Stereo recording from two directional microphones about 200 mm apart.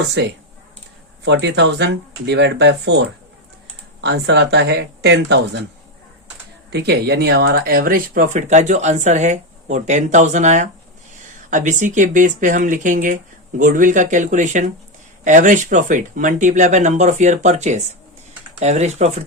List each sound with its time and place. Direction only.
0.2 s speech: 55° right (ahead or behind)
6.7 s speech: 55° right (ahead or behind); by 19.2 s 35° right (ahead or behind)